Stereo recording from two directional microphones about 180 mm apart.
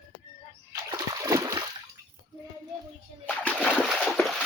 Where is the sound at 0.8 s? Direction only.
20° right (ahead or behind).